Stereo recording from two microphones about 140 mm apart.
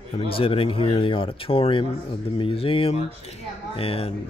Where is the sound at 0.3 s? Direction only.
40° left (ahead or behind).